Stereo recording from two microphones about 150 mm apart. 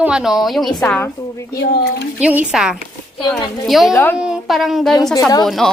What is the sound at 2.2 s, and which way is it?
A woman's voice, 10° right (ahead or behind).